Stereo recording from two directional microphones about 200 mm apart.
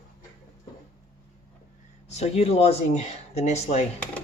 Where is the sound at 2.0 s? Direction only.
30° left (ahead or behind).